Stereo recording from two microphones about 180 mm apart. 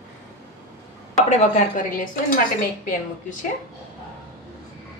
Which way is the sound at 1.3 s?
40° left (ahead or behind).